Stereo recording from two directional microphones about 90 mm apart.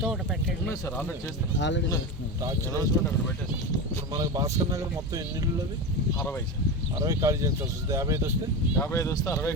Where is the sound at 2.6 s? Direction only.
40° left (ahead or behind).